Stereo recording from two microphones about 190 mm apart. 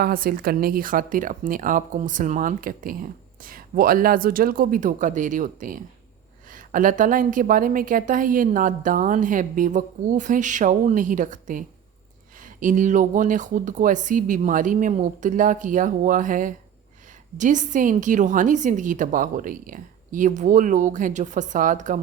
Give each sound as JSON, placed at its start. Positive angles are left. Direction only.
{"t": 0.0, "sound": "a woman's voice", "side_deg": -50}